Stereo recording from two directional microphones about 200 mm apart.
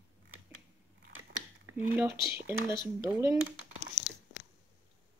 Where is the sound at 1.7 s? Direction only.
90° right.